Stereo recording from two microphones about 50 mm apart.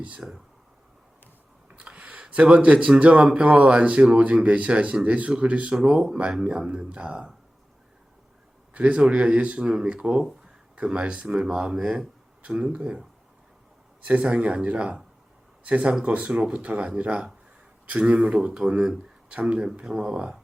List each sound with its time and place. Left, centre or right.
0.2 s speech: centre
1.7 s a sound: centre
2.3 s speech: right
8.7 s speech: right
14.1 s speech: right